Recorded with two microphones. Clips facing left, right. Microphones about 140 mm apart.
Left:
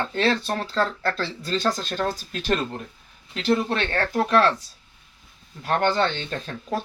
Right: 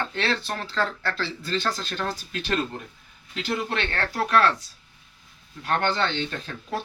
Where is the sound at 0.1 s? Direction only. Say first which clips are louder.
Left 5 dB; 40° left (ahead or behind).